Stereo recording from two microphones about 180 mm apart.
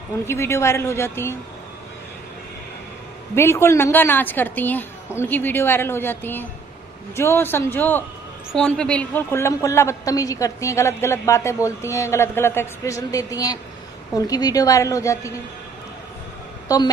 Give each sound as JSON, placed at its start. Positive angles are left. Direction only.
{"t": 0.3, "sound": "a woman's voice", "side_deg": 15}
{"t": 3.3, "sound": "a woman's voice", "side_deg": 15}
{"t": 16.6, "sound": "a woman's voice", "side_deg": 20}